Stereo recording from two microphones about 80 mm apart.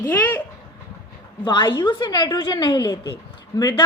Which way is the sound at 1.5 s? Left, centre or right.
Left.